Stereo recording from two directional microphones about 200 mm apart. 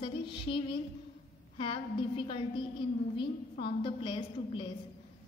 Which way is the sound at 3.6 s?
25° left (ahead or behind).